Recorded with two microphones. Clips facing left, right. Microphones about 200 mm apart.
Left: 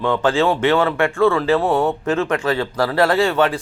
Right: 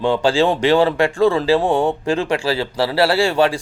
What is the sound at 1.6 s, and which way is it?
Speech, 15° right (ahead or behind).